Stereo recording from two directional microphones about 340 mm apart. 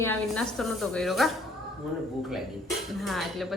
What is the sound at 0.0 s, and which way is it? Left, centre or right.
Speech, centre.